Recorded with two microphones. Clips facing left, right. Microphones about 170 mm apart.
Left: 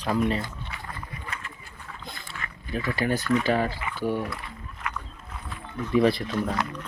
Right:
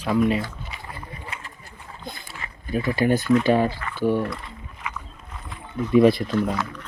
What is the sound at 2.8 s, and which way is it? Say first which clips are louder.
Speech: right 6 dB; 20° right (ahead or behind).